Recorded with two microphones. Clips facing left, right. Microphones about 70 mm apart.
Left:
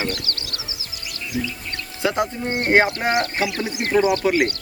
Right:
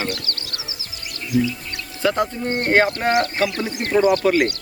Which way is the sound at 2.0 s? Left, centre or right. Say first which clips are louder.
Right 2 dB; centre.